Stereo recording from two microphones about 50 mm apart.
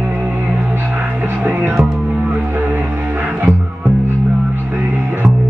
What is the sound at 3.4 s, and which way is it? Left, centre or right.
Music, right.